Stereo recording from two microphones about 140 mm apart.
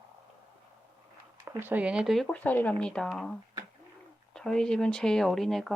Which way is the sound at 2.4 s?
10° left (ahead or behind).